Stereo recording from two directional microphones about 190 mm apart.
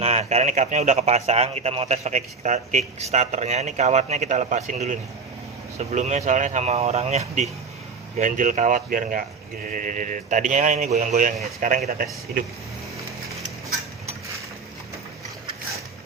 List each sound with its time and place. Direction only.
0.0 s a man's voice: 35° right (ahead or behind)